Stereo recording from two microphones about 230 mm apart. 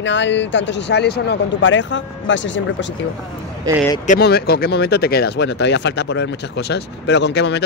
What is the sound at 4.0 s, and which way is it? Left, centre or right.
Speech, left.